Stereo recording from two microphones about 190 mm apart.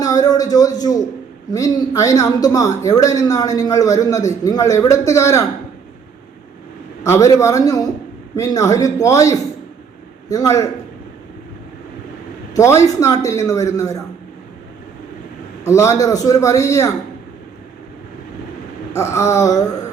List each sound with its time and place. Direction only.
0.0 s a woman's voice: 20° left (ahead or behind)
7.0 s a man's voice: 15° left (ahead or behind)
12.5 s a man's voice: 15° left (ahead or behind)
15.6 s a man's voice: 15° left (ahead or behind)
18.9 s a man's voice: 15° left (ahead or behind)